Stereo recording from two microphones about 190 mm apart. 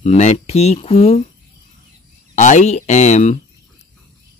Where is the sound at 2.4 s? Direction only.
40° left (ahead or behind).